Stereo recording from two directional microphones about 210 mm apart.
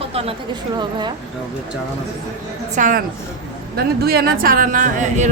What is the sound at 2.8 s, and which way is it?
A woman's voice, 40° right (ahead or behind).